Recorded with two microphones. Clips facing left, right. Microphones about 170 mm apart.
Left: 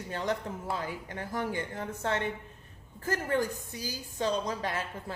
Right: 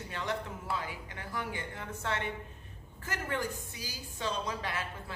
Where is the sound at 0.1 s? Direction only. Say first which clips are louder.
Left 4 dB; 40° left (ahead or behind).